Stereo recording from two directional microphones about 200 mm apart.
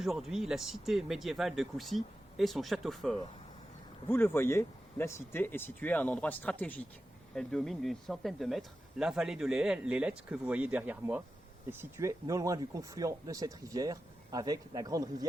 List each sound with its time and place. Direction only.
0.0 s speech: centre (ahead or behind)
4.1 s speech: 10° left (ahead or behind); by 15.3 s 20° right (ahead or behind)